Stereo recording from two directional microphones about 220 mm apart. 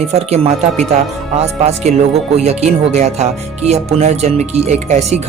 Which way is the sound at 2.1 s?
30° right (ahead or behind).